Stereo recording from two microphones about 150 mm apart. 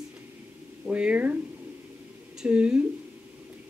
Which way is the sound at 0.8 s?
10° right (ahead or behind).